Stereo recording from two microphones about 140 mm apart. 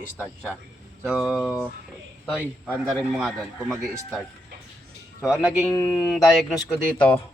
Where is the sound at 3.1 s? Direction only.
Centre (ahead or behind).